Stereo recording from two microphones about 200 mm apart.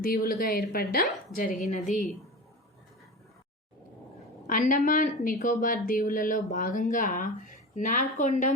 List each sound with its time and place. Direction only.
0.0 s speech: 45° left (ahead or behind)
4.4 s speech: 40° left (ahead or behind)